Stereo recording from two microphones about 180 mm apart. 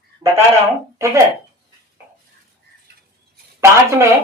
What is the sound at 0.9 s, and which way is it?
Speech, 15° right (ahead or behind).